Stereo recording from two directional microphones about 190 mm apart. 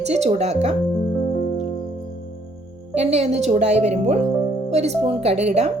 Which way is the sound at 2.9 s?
35° right (ahead or behind).